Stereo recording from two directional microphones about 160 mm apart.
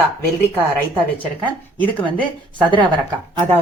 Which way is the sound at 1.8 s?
10° left (ahead or behind).